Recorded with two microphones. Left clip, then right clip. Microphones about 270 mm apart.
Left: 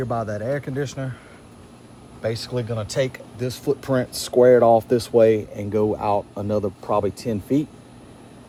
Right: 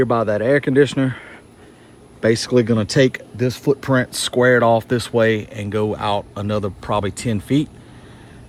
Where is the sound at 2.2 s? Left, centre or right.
Right.